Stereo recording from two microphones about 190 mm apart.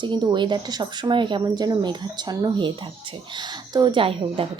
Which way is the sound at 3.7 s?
25° right (ahead or behind).